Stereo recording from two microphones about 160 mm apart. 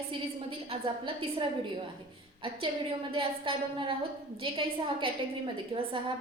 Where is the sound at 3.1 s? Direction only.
35° right (ahead or behind).